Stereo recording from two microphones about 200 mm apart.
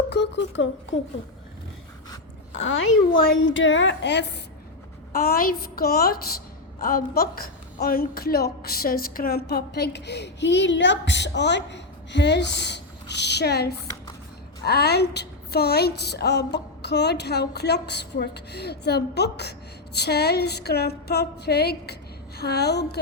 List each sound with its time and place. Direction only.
0.1 s speech: 60° left (ahead or behind)
2.6 s a woman's voice: 75° left (ahead or behind)
5.1 s a woman's voice: 45° left (ahead or behind)